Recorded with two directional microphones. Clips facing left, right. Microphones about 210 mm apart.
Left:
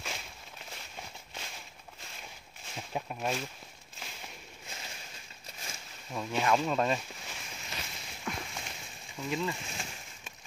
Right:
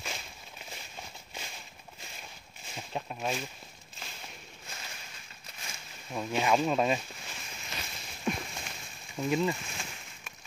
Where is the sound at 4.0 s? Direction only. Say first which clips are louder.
Even; 5° left (ahead or behind).